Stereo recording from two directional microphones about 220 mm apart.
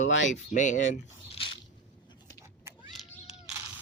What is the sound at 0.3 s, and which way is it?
Speech, 35° left (ahead or behind).